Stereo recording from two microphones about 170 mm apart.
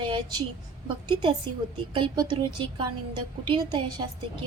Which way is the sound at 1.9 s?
30° right (ahead or behind).